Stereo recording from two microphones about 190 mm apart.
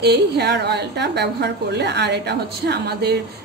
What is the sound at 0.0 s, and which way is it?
A woman's voice, 60° right (ahead or behind).